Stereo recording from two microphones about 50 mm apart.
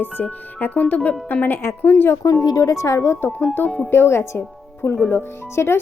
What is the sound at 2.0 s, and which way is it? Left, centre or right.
Speech, left.